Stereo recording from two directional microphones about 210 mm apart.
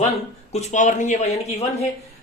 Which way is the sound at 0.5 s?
35° left (ahead or behind).